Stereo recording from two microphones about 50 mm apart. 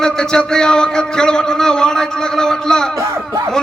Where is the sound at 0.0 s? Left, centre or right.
Centre.